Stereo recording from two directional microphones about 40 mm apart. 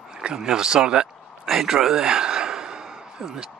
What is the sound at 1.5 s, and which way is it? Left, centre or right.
Speech, centre.